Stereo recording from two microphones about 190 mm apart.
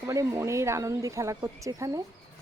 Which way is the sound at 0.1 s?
15° right (ahead or behind).